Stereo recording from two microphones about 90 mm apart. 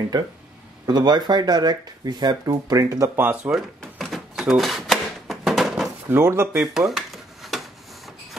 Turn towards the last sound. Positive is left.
turn(degrees=0)  # may be behind; listen again after turning